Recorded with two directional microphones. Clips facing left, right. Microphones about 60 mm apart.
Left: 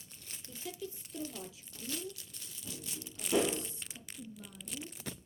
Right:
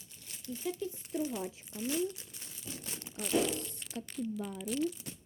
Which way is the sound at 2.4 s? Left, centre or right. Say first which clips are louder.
Even; right.